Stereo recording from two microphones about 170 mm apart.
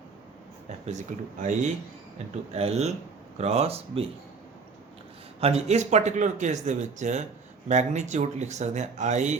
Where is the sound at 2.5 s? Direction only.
40° right (ahead or behind).